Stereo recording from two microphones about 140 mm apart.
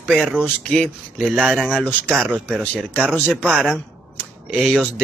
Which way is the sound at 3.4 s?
5° right (ahead or behind).